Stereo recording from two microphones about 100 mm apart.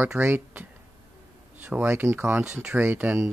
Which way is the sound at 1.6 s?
20° right (ahead or behind).